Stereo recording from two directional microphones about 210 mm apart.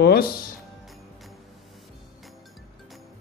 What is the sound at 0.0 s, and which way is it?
Speech, 50° left (ahead or behind).